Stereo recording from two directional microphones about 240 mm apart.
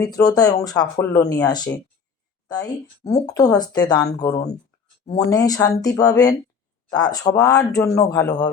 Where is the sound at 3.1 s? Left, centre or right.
Centre.